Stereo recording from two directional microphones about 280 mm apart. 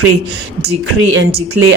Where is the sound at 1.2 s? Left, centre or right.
Right.